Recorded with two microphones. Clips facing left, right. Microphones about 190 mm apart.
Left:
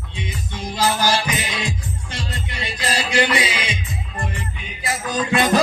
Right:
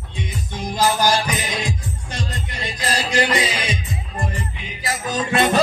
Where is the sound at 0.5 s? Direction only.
40° right (ahead or behind).